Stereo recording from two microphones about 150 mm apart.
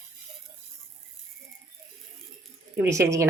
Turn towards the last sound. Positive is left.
turn(degrees=-20)  # may be behind; listen again after turning